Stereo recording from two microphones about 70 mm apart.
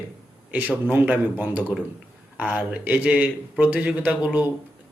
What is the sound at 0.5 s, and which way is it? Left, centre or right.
Speech, right.